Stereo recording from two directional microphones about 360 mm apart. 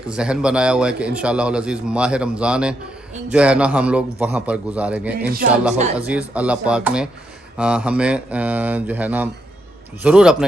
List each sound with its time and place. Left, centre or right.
0.1 s a man's voice: centre
5.1 s speech: right
6.0 s a man's voice: centre